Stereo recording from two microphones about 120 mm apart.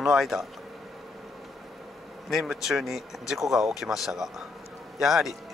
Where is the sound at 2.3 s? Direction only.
Centre (ahead or behind).